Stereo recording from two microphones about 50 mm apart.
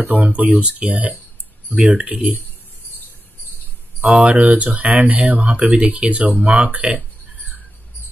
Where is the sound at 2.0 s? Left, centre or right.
Centre.